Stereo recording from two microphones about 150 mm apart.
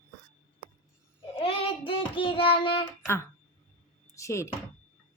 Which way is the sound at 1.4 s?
40° left (ahead or behind).